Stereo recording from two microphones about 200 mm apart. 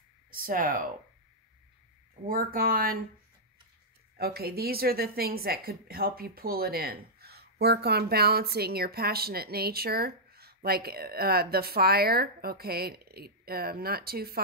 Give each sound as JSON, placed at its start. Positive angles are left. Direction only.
{"t": 0.3, "sound": "a woman's voice", "side_deg": -45}
{"t": 2.2, "sound": "a woman's voice", "side_deg": -45}
{"t": 4.2, "sound": "a woman's voice", "side_deg": -50}